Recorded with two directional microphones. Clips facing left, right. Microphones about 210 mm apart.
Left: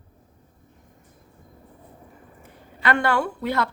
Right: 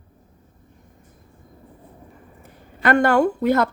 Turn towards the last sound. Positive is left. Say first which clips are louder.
# right 7 dB
turn(degrees=-45)  # may be behind; listen again after turning